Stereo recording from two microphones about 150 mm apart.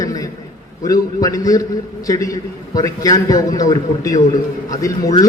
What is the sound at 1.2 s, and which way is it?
A man's voice, 25° left (ahead or behind).